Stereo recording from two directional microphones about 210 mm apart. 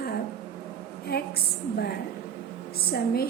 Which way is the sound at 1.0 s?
50° left (ahead or behind).